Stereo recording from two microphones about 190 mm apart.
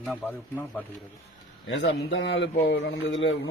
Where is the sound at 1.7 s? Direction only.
70° left (ahead or behind).